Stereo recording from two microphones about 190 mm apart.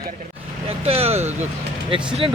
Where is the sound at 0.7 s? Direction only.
30° right (ahead or behind).